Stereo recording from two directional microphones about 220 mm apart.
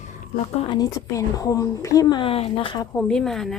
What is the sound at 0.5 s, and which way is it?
A woman's voice, 20° left (ahead or behind).